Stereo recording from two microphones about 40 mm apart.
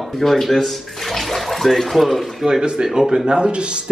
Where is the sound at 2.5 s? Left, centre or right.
Centre.